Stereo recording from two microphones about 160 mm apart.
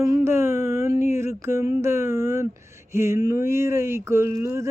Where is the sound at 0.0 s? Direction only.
15° right (ahead or behind).